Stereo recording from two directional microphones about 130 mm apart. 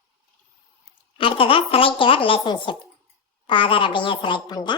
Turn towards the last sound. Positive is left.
turn(degrees=35)  # may be behind; listen again after turning